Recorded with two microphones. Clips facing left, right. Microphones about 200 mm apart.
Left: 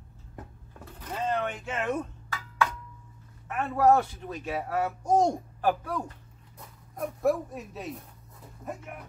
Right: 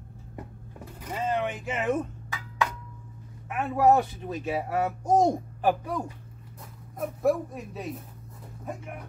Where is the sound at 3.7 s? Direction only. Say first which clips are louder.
Right 1 dB; 15° right (ahead or behind).